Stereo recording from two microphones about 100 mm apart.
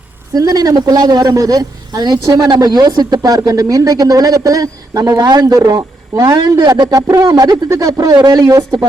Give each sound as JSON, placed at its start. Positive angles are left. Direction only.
{"t": 0.3, "sound": "speech", "side_deg": -40}
{"t": 6.8, "sound": "speech", "side_deg": -35}